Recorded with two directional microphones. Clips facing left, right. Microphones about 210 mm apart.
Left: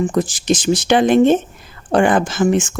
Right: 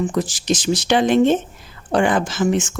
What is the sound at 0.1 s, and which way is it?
Speech, 50° left (ahead or behind).